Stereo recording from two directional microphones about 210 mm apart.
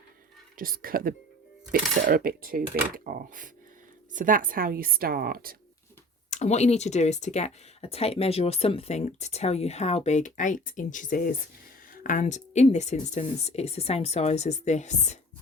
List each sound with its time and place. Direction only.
0.5 s speech: 45° right (ahead or behind)
6.3 s speech: 30° left (ahead or behind)